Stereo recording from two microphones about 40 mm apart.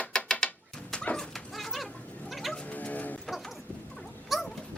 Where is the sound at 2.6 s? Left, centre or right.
Left.